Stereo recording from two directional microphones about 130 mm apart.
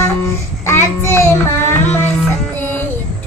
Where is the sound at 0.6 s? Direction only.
20° left (ahead or behind).